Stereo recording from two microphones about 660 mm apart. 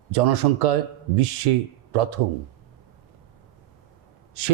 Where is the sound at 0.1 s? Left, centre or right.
Right.